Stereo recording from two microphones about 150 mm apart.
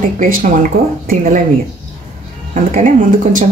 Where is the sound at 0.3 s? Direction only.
65° right (ahead or behind).